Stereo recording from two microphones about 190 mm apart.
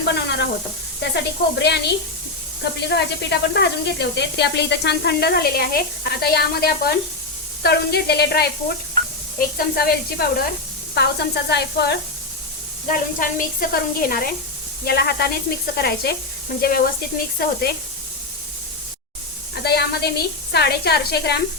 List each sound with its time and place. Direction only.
0.0 s sizzle: 65° left (ahead or behind)
1.1 s speech: 60° left (ahead or behind)
2.9 s speech: 65° left (ahead or behind)
9.0 s sizzle: 25° left (ahead or behind)
9.6 s a woman's voice: 55° left (ahead or behind)
12.9 s a woman's voice: 50° left (ahead or behind)
19.6 s speech: 55° left (ahead or behind)